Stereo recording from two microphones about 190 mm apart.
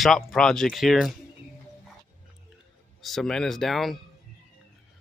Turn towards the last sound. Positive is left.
turn(degrees=0)  # may be behind; listen again after turning